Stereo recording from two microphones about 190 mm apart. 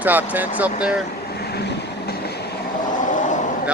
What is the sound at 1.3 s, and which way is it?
Train, 60° left (ahead or behind).